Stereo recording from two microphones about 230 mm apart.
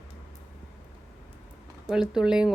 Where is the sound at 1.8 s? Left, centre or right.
Centre.